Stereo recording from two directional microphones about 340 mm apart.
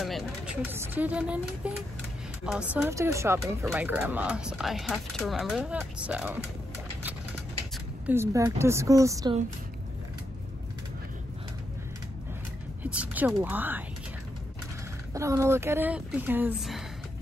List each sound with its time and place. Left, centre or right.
0.0 s speech: centre
7.7 s speech: centre
12.8 s speech: centre
15.1 s speech: centre